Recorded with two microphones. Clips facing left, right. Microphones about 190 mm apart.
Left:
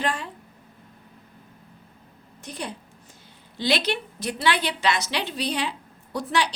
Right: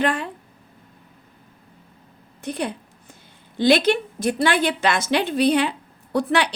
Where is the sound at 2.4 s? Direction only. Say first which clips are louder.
Right 8 dB; 60° right (ahead or behind).